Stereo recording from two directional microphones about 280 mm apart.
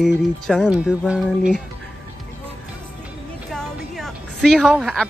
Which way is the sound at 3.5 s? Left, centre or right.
Centre.